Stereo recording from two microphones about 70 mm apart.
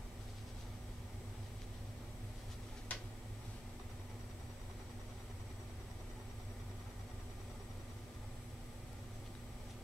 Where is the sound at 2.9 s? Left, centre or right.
Left.